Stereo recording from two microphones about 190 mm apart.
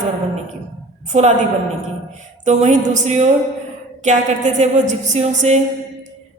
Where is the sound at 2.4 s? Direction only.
40° right (ahead or behind).